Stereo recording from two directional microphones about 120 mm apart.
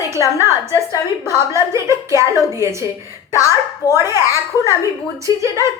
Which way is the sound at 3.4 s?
30° left (ahead or behind).